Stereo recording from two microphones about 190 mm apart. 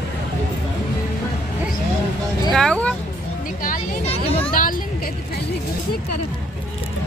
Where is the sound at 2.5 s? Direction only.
5° left (ahead or behind).